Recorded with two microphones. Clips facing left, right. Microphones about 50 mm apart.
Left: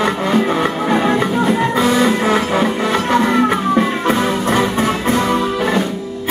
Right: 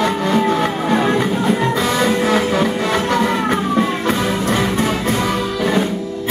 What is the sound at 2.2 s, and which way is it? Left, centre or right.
Music, centre.